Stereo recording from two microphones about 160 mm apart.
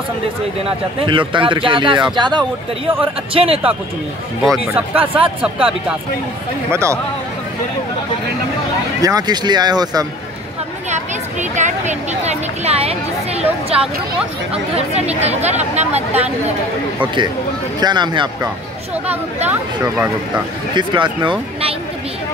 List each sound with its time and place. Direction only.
1.0 s speech: 30° right (ahead or behind)
4.4 s speech: 5° right (ahead or behind)
5.0 s speech: 35° right (ahead or behind)
5.4 s speech: 5° right (ahead or behind)
6.7 s speech: 15° right (ahead or behind)
9.0 s speech: 25° right (ahead or behind)
10.9 s speech: 50° right (ahead or behind)
17.7 s speech: 25° right (ahead or behind)
19.5 s speech: 10° right (ahead or behind)
20.7 s speech: 30° right (ahead or behind)